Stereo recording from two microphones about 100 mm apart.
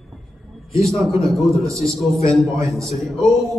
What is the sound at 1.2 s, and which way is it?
Speech, centre (ahead or behind).